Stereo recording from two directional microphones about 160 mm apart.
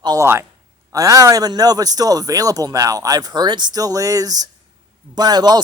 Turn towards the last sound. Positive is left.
turn(degrees=-25)  # may be behind; listen again after turning